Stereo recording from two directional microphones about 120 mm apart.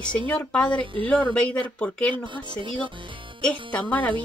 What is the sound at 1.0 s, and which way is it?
Speech, 10° left (ahead or behind).